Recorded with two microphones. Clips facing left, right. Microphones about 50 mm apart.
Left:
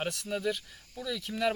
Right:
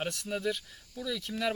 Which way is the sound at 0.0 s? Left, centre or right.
Centre.